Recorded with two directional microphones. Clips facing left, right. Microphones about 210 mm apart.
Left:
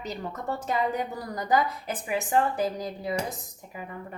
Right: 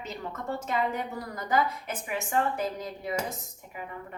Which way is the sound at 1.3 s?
35° left (ahead or behind).